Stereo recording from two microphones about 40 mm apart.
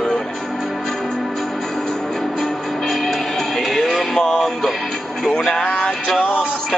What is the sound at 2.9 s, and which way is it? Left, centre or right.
Music, centre.